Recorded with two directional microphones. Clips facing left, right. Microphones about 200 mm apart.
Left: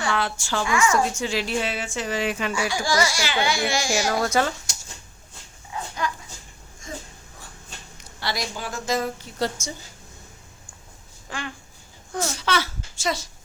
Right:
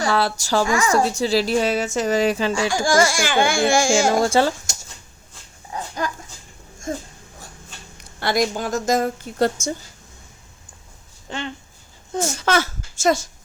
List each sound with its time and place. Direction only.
0.0 s a woman's voice: 35° right (ahead or behind)
2.8 s a woman's voice: 50° right (ahead or behind)
4.2 s speech: 30° right (ahead or behind)
5.7 s dog: 40° right (ahead or behind)
6.8 s a sound: 45° right (ahead or behind)
8.2 s a woman's voice: 50° right (ahead or behind)
11.3 s speech: 25° right (ahead or behind)
12.2 s a woman's voice: 45° right (ahead or behind)